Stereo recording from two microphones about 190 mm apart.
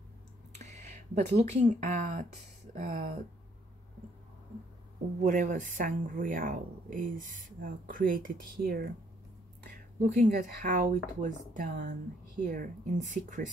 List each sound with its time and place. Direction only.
0.6 s a sound: 40° right (ahead or behind)
1.4 s speech: 40° right (ahead or behind)
5.2 s speech: 40° right (ahead or behind)
10.0 s speech: 40° right (ahead or behind)